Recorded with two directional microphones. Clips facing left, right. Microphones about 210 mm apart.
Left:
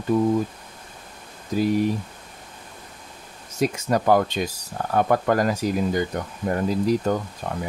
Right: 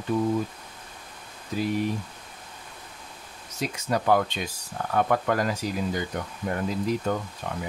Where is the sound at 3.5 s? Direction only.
45° left (ahead or behind).